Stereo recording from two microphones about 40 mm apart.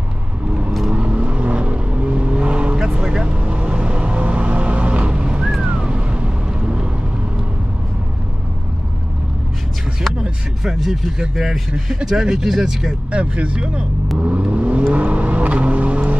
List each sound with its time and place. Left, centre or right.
0.9 s vehicle: right
3.3 s music: right
10.6 s speech: centre
13.1 s speech: right
14.1 s vehicle: right